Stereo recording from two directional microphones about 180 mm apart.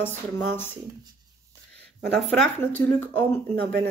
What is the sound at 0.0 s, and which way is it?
Speech, 10° left (ahead or behind).